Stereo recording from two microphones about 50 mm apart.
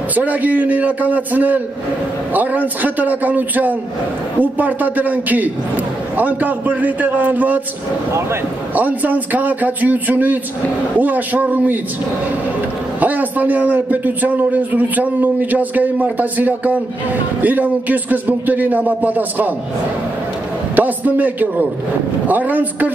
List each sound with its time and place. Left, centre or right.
0.1 s speech: right
8.7 s speech: right
13.0 s speech: right
20.7 s speech: right